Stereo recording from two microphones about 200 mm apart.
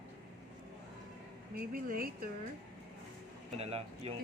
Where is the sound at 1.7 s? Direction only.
45° right (ahead or behind).